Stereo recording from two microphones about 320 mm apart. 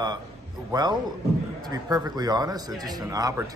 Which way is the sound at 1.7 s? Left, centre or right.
Centre.